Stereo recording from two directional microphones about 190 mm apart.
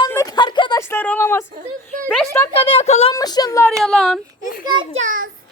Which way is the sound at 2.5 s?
30° left (ahead or behind).